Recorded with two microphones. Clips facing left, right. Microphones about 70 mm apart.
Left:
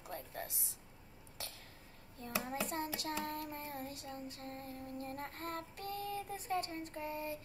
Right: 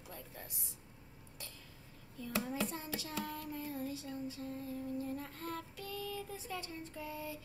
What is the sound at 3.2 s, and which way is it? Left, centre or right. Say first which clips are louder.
Music: even; left.